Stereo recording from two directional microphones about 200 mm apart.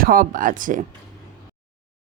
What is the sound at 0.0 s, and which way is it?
Speech, 45° right (ahead or behind).